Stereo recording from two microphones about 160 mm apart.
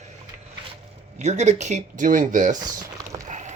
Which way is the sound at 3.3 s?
50° right (ahead or behind).